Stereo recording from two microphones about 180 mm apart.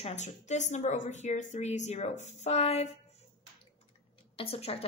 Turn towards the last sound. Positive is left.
turn(degrees=35)  # may be behind; listen again after turning